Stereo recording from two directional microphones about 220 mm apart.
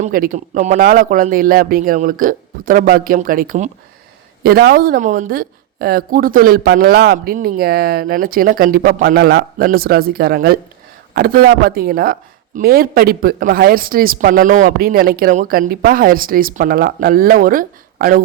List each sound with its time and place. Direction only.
0.0 s speech: 35° right (ahead or behind)